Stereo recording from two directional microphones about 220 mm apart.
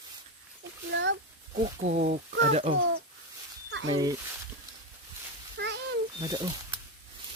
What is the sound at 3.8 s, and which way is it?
Speech, 15° right (ahead or behind).